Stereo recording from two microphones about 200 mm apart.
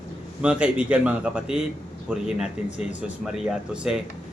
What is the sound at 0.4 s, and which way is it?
Speech, 5° right (ahead or behind).